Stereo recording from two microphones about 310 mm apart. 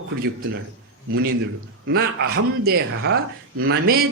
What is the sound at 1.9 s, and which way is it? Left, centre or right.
A man's voice, right.